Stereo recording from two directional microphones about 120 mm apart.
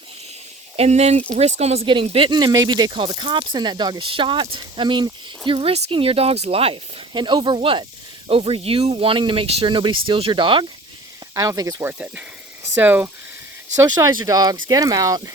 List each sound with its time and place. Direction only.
0.8 s speech: 65° right (ahead or behind)
2.0 s speech: 50° right (ahead or behind)
11.3 s speech: 30° right (ahead or behind)
11.9 s speech: 10° right (ahead or behind)
14.1 s speech: 35° right (ahead or behind)